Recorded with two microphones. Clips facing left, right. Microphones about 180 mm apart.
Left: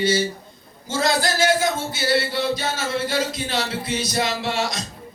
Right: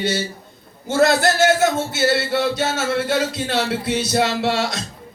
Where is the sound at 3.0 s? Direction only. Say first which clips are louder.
Right 3 dB; 65° right (ahead or behind).